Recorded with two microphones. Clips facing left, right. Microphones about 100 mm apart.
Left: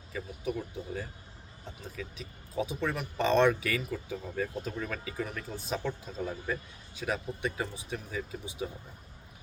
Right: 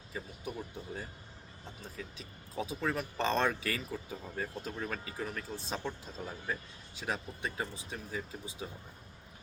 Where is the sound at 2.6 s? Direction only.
35° right (ahead or behind).